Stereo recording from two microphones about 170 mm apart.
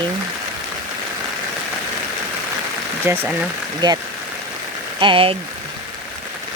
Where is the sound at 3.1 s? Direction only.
15° right (ahead or behind).